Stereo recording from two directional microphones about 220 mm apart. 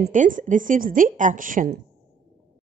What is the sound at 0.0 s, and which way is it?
Speech, 35° right (ahead or behind).